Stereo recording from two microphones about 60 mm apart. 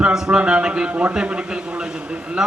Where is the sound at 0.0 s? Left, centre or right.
Centre.